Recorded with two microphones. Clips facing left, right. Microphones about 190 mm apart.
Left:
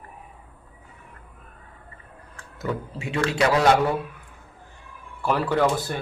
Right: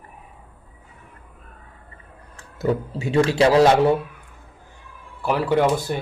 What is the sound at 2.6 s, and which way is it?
A man's voice, 35° right (ahead or behind).